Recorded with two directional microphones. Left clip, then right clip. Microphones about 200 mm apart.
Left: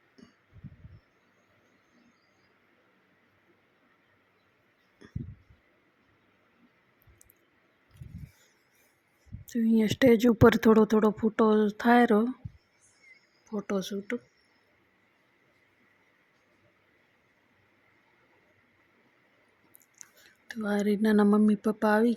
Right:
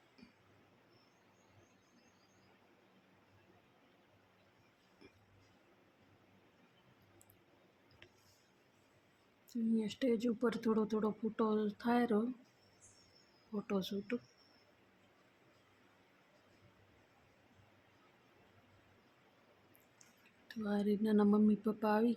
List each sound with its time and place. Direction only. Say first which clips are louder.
9.5 s speech: left 12 dB; 45° left (ahead or behind)
13.5 s speech: left 8 dB; 25° left (ahead or behind)
20.0 s a sound: left 15 dB; 35° left (ahead or behind)
20.5 s speech: left 9 dB; 30° left (ahead or behind)